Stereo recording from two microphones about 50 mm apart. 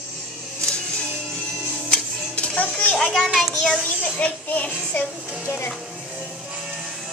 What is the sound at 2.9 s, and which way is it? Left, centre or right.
Speech, centre.